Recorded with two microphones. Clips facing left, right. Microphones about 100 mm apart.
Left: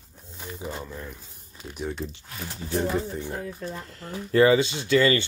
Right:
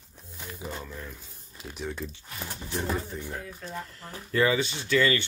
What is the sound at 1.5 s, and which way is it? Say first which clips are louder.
Speech: left 3 dB; 5° right (ahead or behind).